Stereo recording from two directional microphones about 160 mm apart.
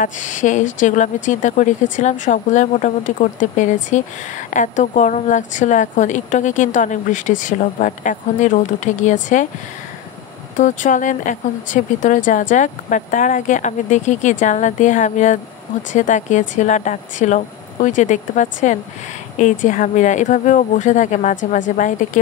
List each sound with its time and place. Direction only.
0.0 s a woman's voice: 50° left (ahead or behind)
10.5 s a woman's voice: 55° left (ahead or behind)